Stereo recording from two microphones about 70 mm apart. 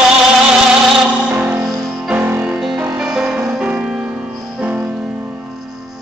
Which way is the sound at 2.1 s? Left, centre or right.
Right.